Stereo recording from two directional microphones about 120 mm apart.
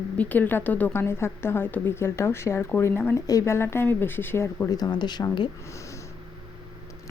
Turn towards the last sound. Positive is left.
turn(degrees=35)  # may be behind; listen again after turning